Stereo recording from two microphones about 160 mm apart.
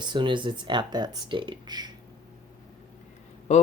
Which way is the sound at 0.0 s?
30° right (ahead or behind).